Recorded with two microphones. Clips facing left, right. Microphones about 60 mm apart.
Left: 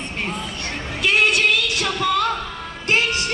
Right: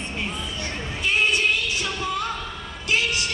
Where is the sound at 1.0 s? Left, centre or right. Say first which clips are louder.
Left 4 dB; left.